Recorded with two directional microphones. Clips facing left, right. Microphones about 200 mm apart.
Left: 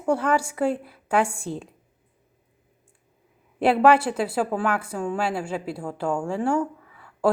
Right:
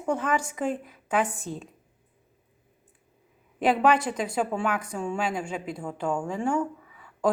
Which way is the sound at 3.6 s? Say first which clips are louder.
Left 4 dB; 10° left (ahead or behind).